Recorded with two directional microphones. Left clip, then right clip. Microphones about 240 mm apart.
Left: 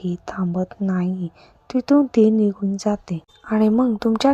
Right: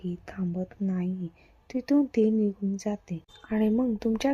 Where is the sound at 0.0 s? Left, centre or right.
Centre.